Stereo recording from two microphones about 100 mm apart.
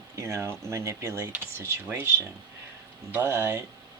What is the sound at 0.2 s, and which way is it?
Speech, 30° right (ahead or behind).